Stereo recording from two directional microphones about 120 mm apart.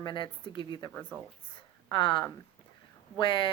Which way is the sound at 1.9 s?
40° left (ahead or behind).